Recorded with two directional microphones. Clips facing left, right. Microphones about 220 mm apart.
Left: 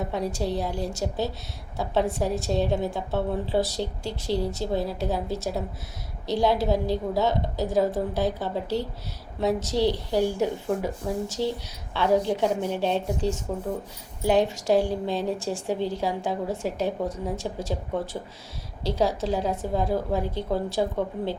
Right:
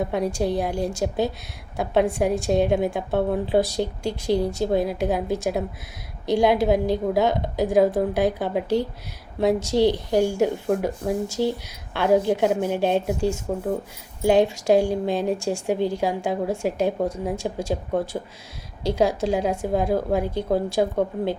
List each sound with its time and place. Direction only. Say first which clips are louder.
0.1 s a woman's voice: right 4 dB; 15° right (ahead or behind)
18.1 s speech: right 4 dB; 45° right (ahead or behind)
18.8 s a woman's voice: right 4 dB; 15° right (ahead or behind)